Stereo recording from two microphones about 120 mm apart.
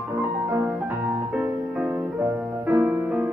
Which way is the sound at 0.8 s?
20° right (ahead or behind).